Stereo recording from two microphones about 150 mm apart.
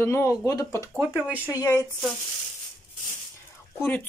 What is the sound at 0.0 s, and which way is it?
Speech, 15° left (ahead or behind).